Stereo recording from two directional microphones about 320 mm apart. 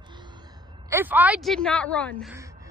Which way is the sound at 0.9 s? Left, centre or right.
Centre.